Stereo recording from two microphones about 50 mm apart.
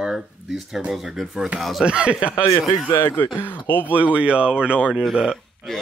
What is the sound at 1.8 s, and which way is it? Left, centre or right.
Speech, right.